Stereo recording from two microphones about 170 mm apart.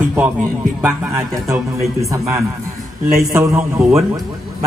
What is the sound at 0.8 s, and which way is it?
A man's voice, 15° right (ahead or behind).